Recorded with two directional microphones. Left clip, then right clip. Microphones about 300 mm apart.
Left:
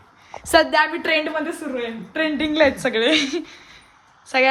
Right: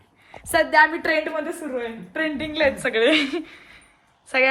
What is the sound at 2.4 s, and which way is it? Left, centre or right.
Speech, left.